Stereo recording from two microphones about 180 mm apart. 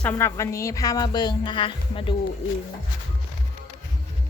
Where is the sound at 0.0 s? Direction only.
10° left (ahead or behind); by 2.1 s 30° left (ahead or behind).